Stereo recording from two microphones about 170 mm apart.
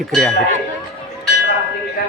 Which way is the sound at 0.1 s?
Centre (ahead or behind).